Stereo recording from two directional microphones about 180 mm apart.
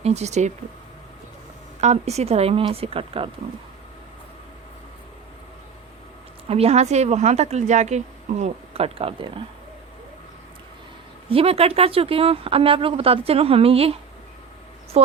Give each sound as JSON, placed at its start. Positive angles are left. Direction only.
{"t": 0.0, "sound": "a woman's voice", "side_deg": -40}
{"t": 1.8, "sound": "a woman's voice", "side_deg": -40}
{"t": 6.5, "sound": "a woman's voice", "side_deg": -35}
{"t": 11.3, "sound": "a woman's voice", "side_deg": -30}